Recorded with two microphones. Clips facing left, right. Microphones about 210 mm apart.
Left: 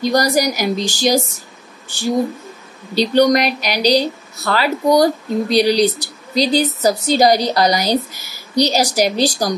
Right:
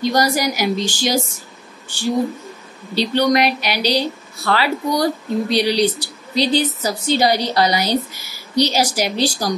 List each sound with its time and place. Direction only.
0.0 s speech: 40° left (ahead or behind)